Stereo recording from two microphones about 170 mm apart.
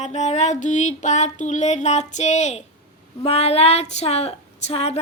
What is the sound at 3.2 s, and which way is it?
Child singing, 35° left (ahead or behind).